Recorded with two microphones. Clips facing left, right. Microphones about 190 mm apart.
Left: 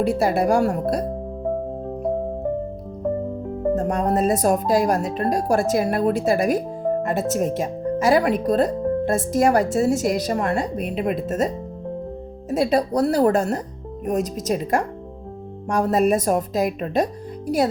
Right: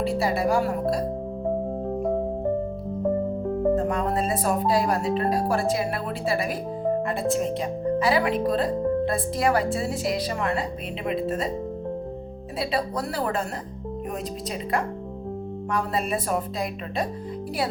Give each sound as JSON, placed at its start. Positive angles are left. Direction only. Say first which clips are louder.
{"t": 0.2, "sound": "speech", "louder": "left 3 dB", "side_deg": 50}
{"t": 3.8, "sound": "speech", "louder": "left 4 dB", "side_deg": 40}